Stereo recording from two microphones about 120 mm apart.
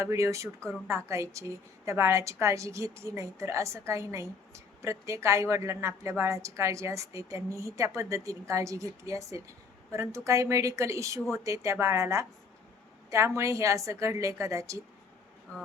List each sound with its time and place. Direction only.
0.0 s a woman's voice: 25° right (ahead or behind)